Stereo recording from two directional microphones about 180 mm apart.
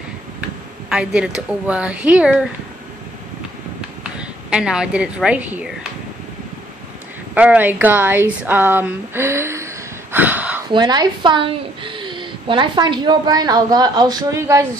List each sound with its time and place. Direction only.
0.8 s speech: 5° right (ahead or behind)
4.2 s speech: 5° right (ahead or behind)
7.3 s a woman's voice: 10° right (ahead or behind)
10.1 s a sound: 10° right (ahead or behind)
10.7 s a woman's voice: 25° right (ahead or behind)